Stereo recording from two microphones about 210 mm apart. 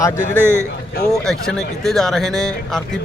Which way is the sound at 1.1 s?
Centre (ahead or behind).